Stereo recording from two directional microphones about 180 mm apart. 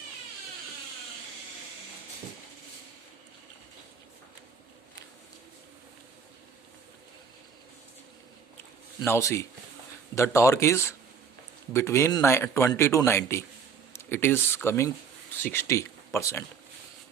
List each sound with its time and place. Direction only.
9.0 s speech: 15° left (ahead or behind)